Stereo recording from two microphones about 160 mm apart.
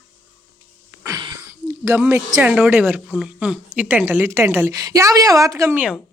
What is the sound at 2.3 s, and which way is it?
Speech, 5° right (ahead or behind).